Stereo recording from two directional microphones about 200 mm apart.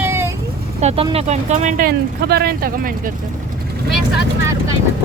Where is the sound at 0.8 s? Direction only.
30° right (ahead or behind).